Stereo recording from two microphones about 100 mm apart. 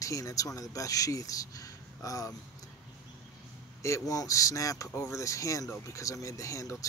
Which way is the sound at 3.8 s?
35° left (ahead or behind).